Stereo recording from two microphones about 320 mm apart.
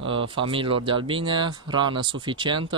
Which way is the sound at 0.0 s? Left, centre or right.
Centre.